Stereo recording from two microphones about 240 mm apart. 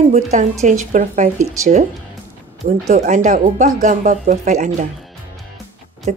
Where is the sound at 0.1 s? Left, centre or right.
Right.